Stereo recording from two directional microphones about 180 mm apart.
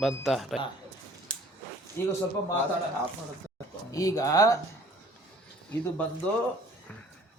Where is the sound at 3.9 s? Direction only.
20° left (ahead or behind).